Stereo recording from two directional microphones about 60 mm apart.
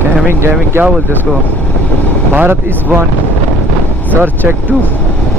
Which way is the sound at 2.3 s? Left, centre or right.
Right.